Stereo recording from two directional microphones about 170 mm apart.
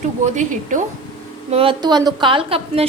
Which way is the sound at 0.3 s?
45° right (ahead or behind).